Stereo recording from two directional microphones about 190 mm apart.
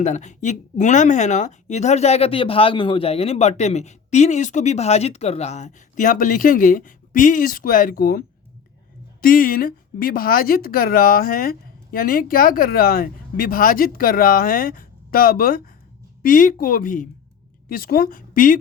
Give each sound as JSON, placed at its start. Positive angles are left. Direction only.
{"t": 0.0, "sound": "speech", "side_deg": 40}
{"t": 9.2, "sound": "a woman's voice", "side_deg": 50}